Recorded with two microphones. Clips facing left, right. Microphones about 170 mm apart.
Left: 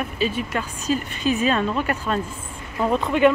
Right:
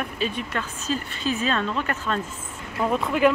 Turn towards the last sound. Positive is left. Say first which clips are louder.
# left 3 dB
turn(degrees=0)  # may be behind; listen again after turning